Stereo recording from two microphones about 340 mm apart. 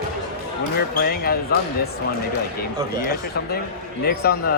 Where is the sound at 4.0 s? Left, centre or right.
Left.